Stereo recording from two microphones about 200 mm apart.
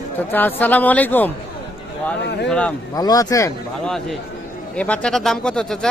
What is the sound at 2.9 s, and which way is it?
Speech, 20° left (ahead or behind).